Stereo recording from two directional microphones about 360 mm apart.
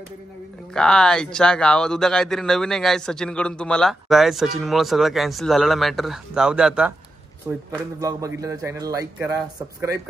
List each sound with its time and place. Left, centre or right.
0.7 s a man's voice: centre